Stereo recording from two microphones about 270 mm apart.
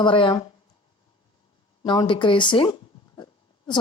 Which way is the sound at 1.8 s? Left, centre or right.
Centre.